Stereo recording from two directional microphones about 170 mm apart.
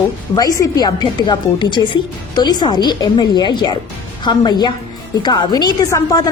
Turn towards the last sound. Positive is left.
turn(degrees=20)  # may be behind; listen again after turning